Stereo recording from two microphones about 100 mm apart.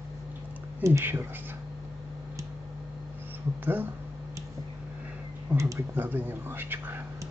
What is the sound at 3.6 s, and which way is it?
Speech, 20° right (ahead or behind).